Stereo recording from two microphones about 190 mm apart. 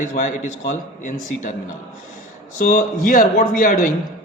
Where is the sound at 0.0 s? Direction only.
40° left (ahead or behind).